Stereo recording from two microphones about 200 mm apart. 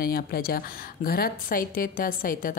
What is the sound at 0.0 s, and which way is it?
Speech, 45° left (ahead or behind).